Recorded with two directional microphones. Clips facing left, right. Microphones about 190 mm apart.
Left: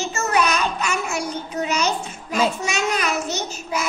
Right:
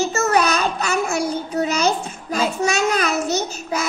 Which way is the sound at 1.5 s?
35° right (ahead or behind).